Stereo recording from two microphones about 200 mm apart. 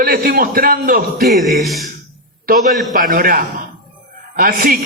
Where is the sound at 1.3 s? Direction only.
Centre (ahead or behind).